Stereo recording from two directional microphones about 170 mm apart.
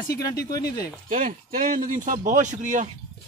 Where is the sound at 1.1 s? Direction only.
50° right (ahead or behind).